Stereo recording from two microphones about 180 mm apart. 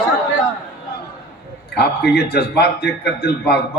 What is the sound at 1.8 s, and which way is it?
A man's voice, 65° left (ahead or behind).